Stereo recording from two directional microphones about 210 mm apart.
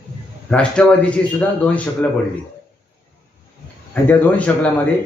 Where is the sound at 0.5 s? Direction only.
5° left (ahead or behind).